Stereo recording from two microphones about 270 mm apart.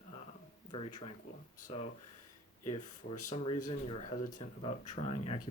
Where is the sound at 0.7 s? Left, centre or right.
Left.